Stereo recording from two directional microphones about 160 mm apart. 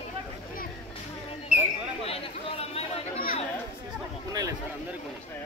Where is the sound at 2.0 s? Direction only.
40° left (ahead or behind).